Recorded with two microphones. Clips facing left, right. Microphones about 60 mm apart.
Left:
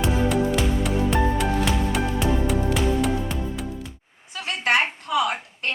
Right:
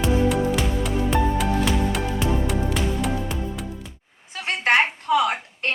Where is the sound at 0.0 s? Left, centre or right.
Centre.